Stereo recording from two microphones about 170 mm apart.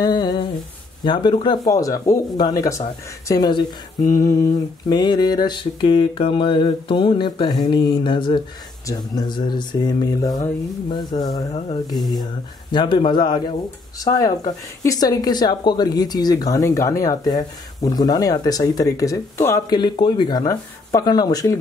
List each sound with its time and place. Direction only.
0.0 s humming: 25° left (ahead or behind)
1.0 s speech: 25° left (ahead or behind)